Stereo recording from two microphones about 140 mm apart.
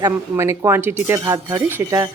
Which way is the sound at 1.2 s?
30° right (ahead or behind).